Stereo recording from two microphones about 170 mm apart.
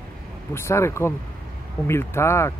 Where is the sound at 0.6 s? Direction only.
15° left (ahead or behind).